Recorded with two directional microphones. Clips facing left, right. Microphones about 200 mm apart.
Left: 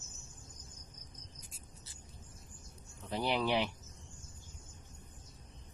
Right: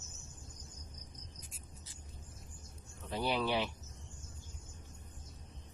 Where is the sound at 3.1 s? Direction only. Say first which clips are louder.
Left 1 dB; 15° left (ahead or behind).